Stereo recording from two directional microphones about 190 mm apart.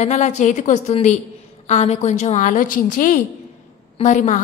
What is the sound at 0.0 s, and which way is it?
A woman's voice, 40° left (ahead or behind).